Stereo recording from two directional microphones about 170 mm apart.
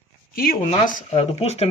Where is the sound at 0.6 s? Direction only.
45° left (ahead or behind).